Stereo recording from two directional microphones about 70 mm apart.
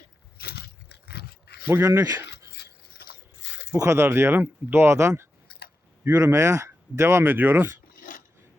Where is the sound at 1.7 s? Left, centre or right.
Right.